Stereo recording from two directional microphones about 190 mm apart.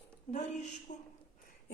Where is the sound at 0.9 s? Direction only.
40° left (ahead or behind).